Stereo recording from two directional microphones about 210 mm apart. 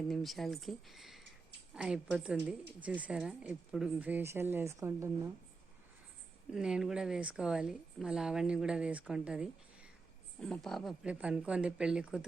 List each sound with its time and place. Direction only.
0.1 s a woman's voice: centre (ahead or behind)
6.5 s a woman's voice: 5° right (ahead or behind)